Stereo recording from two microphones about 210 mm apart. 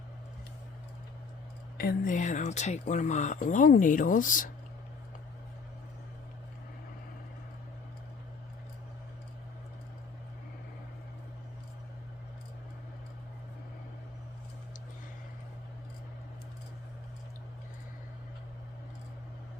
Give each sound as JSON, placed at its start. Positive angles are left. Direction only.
{"t": 1.8, "sound": "speech", "side_deg": 45}